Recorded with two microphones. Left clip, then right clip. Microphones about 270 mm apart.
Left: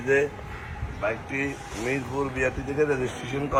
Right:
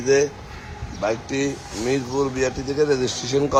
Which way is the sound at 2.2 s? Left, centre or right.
Centre.